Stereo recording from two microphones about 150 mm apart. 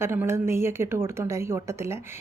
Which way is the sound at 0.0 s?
15° right (ahead or behind).